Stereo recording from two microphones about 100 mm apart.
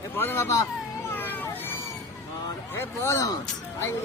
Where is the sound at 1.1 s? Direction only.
20° left (ahead or behind).